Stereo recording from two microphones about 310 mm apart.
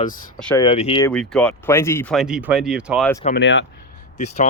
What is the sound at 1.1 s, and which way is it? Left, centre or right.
Speech, centre.